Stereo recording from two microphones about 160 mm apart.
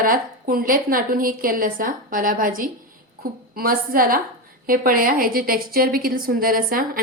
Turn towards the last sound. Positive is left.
turn(degrees=-60)  # may be behind; listen again after turning